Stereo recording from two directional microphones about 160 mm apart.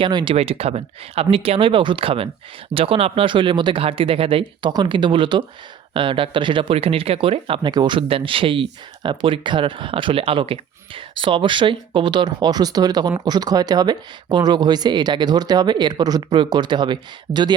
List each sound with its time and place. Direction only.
0.0 s speech: 30° right (ahead or behind)